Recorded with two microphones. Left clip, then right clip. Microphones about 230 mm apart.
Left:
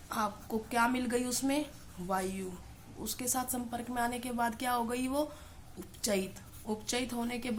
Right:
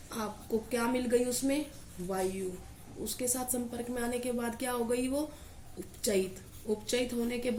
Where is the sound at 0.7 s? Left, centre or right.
Left.